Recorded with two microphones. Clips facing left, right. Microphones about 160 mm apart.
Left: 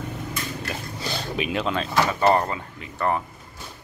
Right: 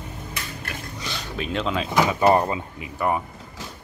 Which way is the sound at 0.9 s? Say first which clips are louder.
Left 4 dB; 35° left (ahead or behind).